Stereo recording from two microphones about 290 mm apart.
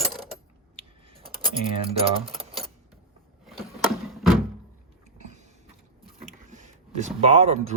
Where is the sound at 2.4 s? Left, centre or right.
Centre.